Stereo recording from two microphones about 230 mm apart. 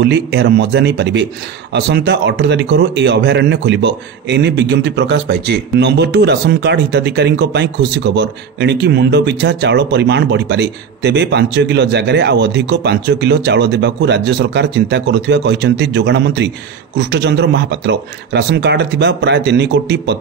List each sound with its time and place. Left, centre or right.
0.0 s speech: right